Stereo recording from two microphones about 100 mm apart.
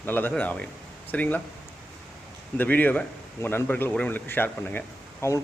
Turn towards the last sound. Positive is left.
turn(degrees=25)  # may be behind; listen again after turning